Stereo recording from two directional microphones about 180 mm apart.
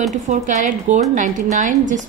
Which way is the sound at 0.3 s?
45° right (ahead or behind).